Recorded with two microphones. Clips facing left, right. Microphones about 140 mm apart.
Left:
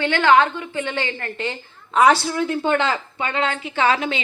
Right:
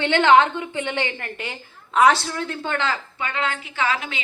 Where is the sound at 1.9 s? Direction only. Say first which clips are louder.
Left 2 dB; centre (ahead or behind); by 4.2 s 25° left (ahead or behind).